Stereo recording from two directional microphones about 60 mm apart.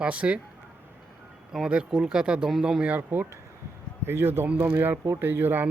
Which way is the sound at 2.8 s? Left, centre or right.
Right.